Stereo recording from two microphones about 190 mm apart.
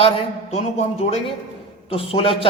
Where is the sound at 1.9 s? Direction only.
30° left (ahead or behind).